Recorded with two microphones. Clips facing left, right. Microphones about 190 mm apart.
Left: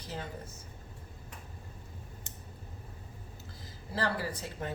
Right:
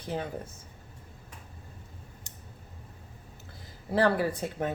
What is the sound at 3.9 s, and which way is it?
Speech, 55° right (ahead or behind).